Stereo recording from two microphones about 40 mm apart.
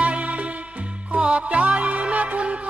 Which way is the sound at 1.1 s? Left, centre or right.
Right.